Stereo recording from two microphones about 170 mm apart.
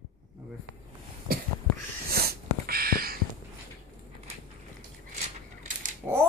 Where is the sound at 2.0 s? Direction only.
65° right (ahead or behind).